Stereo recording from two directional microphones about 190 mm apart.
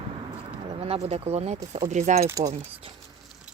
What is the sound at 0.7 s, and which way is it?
Speech, 35° right (ahead or behind).